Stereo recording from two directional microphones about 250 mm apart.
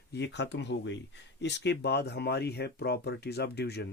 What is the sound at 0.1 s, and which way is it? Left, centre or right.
Speech, left.